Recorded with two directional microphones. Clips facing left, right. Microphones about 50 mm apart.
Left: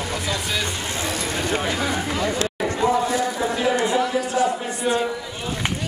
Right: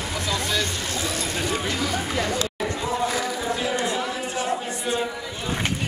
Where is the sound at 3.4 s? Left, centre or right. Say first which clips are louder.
Left 5 dB; left.